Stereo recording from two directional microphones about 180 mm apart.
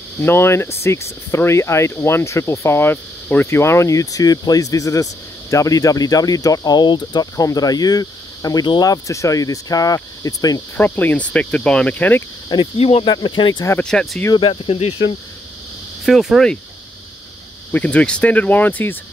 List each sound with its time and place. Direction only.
0.2 s speech: 15° left (ahead or behind)
10.8 s speech: 10° left (ahead or behind)
12.4 s speech: 30° left (ahead or behind)
13.7 s speech: 5° left (ahead or behind)
14.3 s speech: 30° left (ahead or behind)
16.1 s speech: centre (ahead or behind)
17.7 s speech: 10° left (ahead or behind)